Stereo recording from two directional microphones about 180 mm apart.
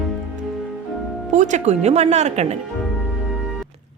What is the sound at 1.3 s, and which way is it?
Speech, 40° right (ahead or behind).